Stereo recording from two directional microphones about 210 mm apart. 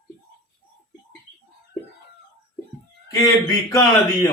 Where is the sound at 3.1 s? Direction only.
15° left (ahead or behind).